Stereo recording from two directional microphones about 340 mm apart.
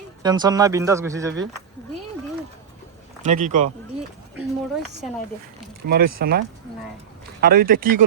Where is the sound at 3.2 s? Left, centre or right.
Right.